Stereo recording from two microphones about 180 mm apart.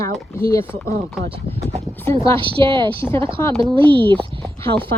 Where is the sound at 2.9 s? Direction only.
15° left (ahead or behind).